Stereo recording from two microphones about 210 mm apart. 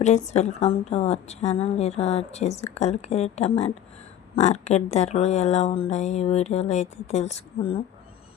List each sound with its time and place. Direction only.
0.0 s a woman's voice: 35° left (ahead or behind)